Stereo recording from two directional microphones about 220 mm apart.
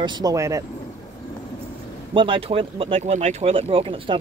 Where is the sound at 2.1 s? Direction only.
25° right (ahead or behind).